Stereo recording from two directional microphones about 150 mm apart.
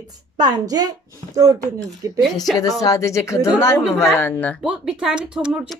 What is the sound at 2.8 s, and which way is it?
Speech, 20° left (ahead or behind).